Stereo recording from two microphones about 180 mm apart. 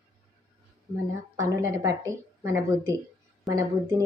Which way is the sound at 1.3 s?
20° right (ahead or behind).